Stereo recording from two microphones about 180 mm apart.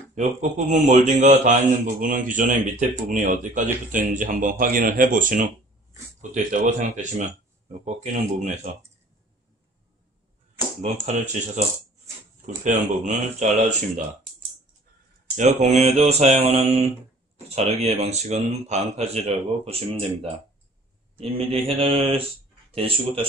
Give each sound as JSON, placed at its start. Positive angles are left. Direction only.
{"t": 0.1, "sound": "speech", "side_deg": -45}
{"t": 10.8, "sound": "speech", "side_deg": -40}
{"t": 12.6, "sound": "speech", "side_deg": -40}
{"t": 15.3, "sound": "speech", "side_deg": -40}